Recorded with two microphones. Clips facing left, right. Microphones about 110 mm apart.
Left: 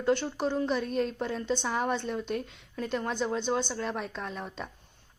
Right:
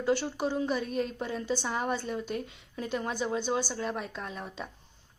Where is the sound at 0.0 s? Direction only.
5° right (ahead or behind).